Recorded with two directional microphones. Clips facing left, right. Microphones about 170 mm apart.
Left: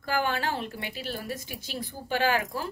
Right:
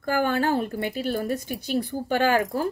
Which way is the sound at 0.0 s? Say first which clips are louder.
Right 5 dB; 45° right (ahead or behind).